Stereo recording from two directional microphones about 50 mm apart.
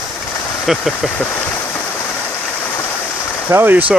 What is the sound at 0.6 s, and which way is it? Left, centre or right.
Speech, centre.